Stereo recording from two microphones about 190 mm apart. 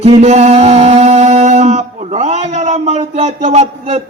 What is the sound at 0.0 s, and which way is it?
Music, 35° right (ahead or behind).